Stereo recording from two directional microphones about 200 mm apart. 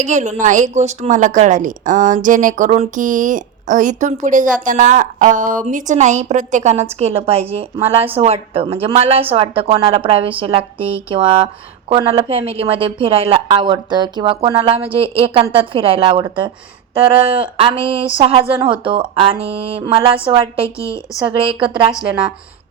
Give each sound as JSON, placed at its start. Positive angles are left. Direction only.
{"t": 0.0, "sound": "a woman's voice", "side_deg": -35}
{"t": 20.7, "sound": "a woman's voice", "side_deg": 15}
{"t": 21.4, "sound": "a woman's voice", "side_deg": -25}